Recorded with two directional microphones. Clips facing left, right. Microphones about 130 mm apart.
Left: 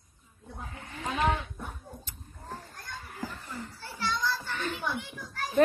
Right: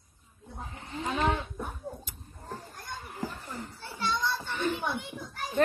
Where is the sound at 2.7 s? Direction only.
15° right (ahead or behind).